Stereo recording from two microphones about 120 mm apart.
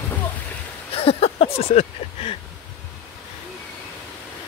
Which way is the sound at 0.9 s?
55° left (ahead or behind).